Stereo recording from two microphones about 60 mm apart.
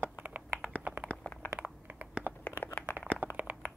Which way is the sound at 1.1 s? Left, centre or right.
Left.